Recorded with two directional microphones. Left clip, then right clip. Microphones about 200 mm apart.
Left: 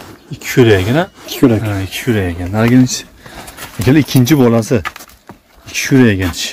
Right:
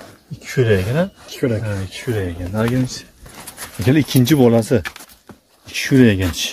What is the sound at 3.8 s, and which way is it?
Speech, centre (ahead or behind).